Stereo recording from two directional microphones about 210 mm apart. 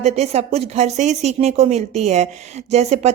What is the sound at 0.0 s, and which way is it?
Speech, 30° right (ahead or behind).